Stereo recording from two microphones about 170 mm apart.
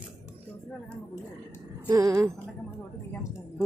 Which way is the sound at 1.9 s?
20° right (ahead or behind).